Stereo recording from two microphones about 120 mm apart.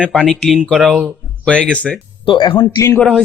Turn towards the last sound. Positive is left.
turn(degrees=5)  # may be behind; listen again after turning